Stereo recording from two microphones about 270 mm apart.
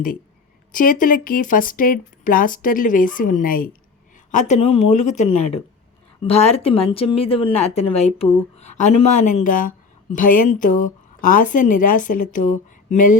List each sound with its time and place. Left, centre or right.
0.7 s speech: left